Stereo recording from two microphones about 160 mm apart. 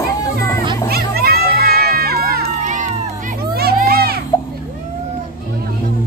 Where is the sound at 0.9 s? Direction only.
75° right (ahead or behind); by 2.9 s 55° right (ahead or behind).